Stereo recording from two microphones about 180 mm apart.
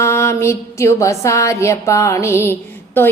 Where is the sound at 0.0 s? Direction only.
15° left (ahead or behind).